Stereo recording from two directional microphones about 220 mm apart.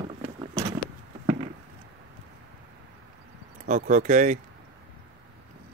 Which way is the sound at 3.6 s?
35° right (ahead or behind).